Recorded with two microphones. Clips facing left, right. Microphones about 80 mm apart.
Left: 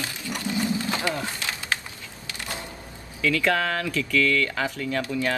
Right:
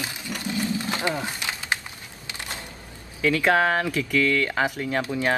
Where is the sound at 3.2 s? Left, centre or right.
Right.